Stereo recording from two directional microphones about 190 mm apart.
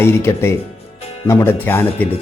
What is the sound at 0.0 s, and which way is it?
A man's voice, 15° left (ahead or behind).